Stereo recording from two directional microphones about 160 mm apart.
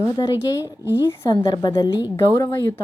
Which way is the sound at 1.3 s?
25° left (ahead or behind).